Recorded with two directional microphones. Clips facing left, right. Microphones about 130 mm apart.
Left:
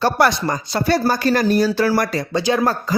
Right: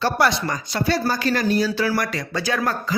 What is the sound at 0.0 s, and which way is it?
Speech, 45° left (ahead or behind).